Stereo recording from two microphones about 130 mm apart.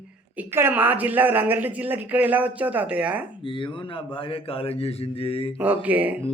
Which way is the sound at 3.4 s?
40° left (ahead or behind).